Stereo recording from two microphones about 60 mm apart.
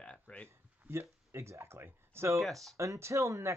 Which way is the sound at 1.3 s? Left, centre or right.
Right.